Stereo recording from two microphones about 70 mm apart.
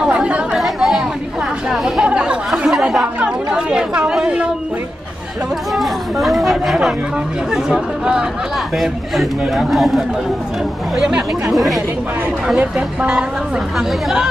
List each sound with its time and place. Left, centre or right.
0.0 s chatter: centre
0.6 s chatter: centre
2.0 s a sound: centre
3.0 s chatter: centre
5.8 s chatter: centre
7.5 s a man's voice: centre
12.5 s speech: centre